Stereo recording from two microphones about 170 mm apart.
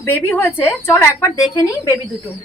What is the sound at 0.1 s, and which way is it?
A woman's voice, 10° left (ahead or behind).